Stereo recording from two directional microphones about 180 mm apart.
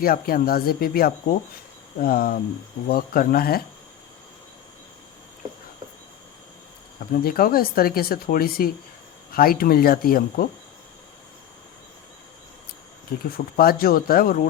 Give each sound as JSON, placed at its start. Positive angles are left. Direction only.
{"t": 0.0, "sound": "speech", "side_deg": 55}
{"t": 7.1, "sound": "speech", "side_deg": 55}
{"t": 13.3, "sound": "speech", "side_deg": 55}